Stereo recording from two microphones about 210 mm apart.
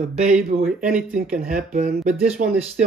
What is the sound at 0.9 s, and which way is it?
Speech, 5° right (ahead or behind).